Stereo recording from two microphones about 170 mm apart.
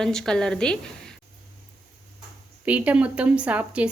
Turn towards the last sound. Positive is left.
turn(degrees=-10)  # may be behind; listen again after turning